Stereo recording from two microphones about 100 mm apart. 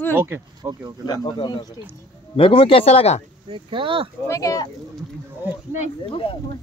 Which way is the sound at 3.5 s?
60° right (ahead or behind).